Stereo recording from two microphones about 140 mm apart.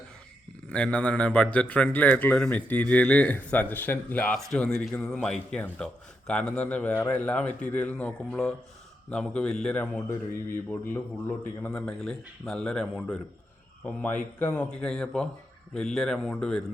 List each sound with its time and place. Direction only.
0.7 s a man's voice: 10° left (ahead or behind)
11.6 s speech: 5° left (ahead or behind)